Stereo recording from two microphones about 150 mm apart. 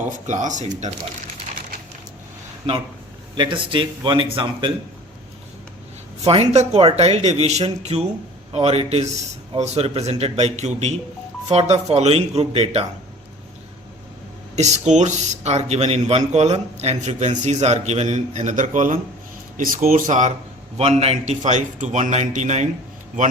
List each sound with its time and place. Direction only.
0.1 s speech: 55° right (ahead or behind)
3.3 s speech: 30° right (ahead or behind)
6.2 s speech: 45° right (ahead or behind)
14.5 s speech: 50° right (ahead or behind)
19.5 s speech: 70° right (ahead or behind)
20.7 s speech: 45° right (ahead or behind)